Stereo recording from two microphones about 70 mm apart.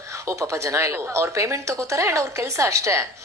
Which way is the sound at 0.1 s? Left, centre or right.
Right.